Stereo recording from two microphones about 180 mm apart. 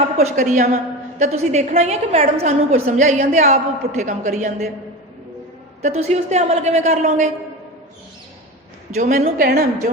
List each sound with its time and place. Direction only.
0.2 s a woman's voice: 40° right (ahead or behind)
5.8 s a woman's voice: 35° right (ahead or behind)
8.9 s a woman's voice: 45° right (ahead or behind)